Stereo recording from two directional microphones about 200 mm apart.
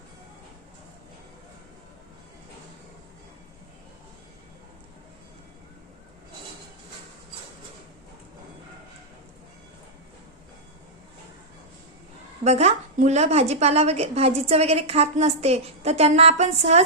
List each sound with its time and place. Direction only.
12.5 s a woman's voice: 35° right (ahead or behind)